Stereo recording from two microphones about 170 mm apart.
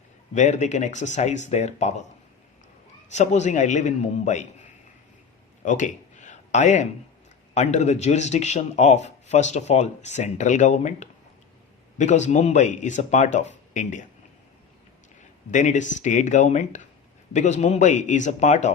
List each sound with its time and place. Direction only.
0.3 s speech: 45° left (ahead or behind)
3.1 s speech: 45° left (ahead or behind)
5.6 s a sound: 45° left (ahead or behind)
7.5 s speech: 40° left (ahead or behind)
15.2 s speech: 45° left (ahead or behind)